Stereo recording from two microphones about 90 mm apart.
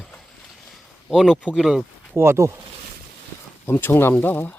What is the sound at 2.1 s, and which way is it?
Speech, 30° right (ahead or behind).